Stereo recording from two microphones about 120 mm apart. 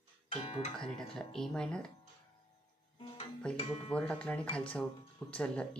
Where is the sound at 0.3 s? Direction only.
50° left (ahead or behind).